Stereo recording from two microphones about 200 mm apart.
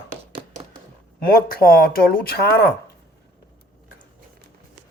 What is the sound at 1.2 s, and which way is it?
Speech, 45° left (ahead or behind).